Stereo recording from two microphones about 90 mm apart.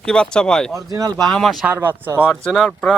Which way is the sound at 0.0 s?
10° left (ahead or behind).